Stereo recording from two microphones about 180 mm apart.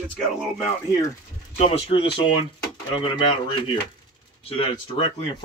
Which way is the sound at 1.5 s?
35° left (ahead or behind).